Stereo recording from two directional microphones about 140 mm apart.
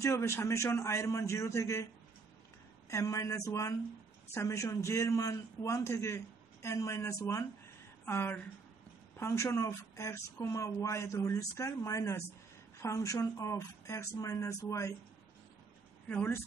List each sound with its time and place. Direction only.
0.0 s speech: 20° left (ahead or behind)
2.9 s a man's voice: 25° left (ahead or behind)
16.1 s speech: 15° left (ahead or behind)